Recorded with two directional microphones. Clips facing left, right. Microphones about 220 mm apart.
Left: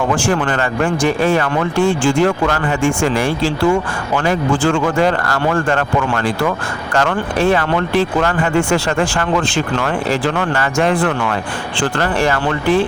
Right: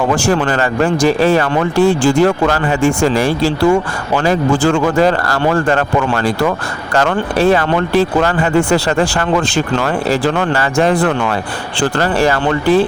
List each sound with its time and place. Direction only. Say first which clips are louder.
0.2 s speech: right 3 dB; 40° right (ahead or behind)